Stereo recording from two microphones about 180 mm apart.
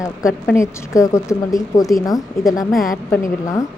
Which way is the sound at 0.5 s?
15° left (ahead or behind).